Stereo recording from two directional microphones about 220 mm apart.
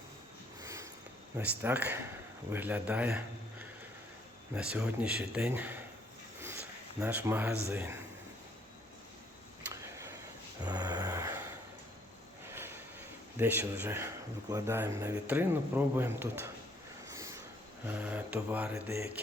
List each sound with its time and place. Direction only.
0.6 s sniff: 15° right (ahead or behind)
1.4 s a man's voice: 10° right (ahead or behind)
7.0 s speech: 10° right (ahead or behind)
10.6 s gasp: 15° right (ahead or behind)
12.5 s a sound: 10° right (ahead or behind)
13.4 s speech: 10° right (ahead or behind)
17.1 s a sound: 15° right (ahead or behind)
17.8 s speech: 5° right (ahead or behind)